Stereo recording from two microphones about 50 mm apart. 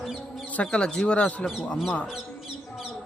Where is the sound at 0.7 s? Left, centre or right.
Centre.